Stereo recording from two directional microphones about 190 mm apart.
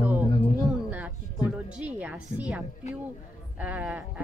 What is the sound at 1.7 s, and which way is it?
Music, 5° right (ahead or behind).